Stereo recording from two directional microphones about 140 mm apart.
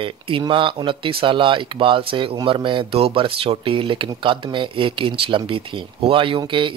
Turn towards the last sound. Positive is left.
turn(degrees=-35)  # may be behind; listen again after turning